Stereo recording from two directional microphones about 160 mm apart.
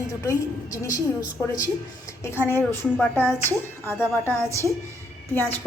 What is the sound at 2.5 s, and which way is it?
Speech, 15° left (ahead or behind).